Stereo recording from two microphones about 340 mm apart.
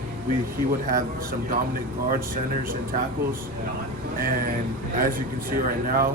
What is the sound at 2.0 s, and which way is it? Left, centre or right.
Speech, right.